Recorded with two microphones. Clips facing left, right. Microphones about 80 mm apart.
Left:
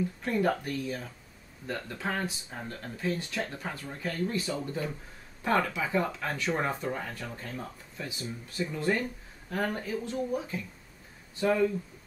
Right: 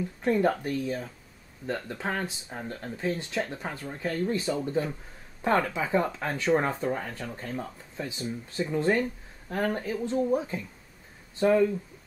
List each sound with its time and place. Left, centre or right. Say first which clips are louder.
0.2 s speech: right 5 dB; right